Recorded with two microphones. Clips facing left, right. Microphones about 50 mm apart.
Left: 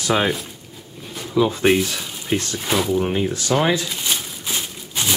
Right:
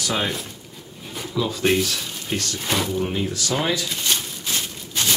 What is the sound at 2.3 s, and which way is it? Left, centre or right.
Speech, left.